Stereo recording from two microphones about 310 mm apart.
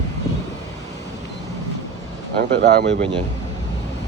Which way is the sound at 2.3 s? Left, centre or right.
Right.